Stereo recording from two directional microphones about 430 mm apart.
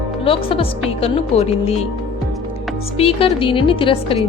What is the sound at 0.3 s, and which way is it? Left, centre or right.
Speech, centre.